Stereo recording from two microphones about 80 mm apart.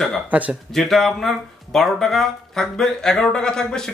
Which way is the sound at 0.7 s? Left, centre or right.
Centre.